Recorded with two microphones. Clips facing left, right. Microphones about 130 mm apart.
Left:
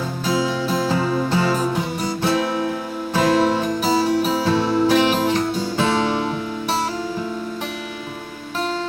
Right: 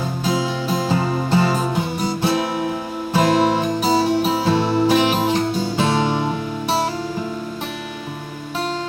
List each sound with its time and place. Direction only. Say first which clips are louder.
0.3 s music: left 1 dB; 20° right (ahead or behind)